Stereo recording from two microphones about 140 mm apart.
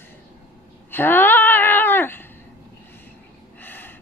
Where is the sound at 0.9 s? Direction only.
15° left (ahead or behind).